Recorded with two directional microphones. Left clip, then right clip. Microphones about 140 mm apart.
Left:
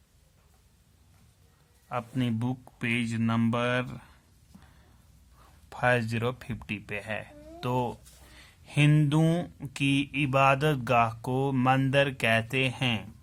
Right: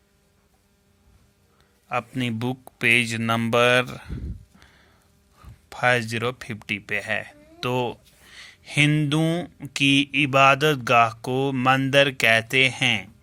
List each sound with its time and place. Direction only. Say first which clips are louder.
1.9 s speech: right 6 dB; 25° right (ahead or behind)
5.6 s speech: right 5 dB; 15° right (ahead or behind)
8.4 s a sound: right 8 dB; 20° right (ahead or behind)
8.9 s speech: right 4 dB; 10° right (ahead or behind)
9.7 s speech: right 9 dB; 25° right (ahead or behind)